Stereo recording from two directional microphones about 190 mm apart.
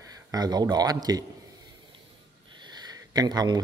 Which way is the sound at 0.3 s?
20° right (ahead or behind).